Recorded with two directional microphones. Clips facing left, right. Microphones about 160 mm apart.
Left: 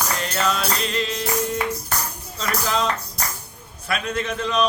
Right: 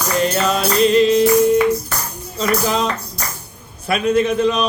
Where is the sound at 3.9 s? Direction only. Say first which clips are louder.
Right 10 dB; 10° right (ahead or behind).